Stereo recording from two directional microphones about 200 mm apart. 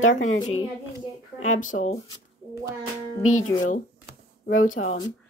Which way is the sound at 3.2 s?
40° left (ahead or behind).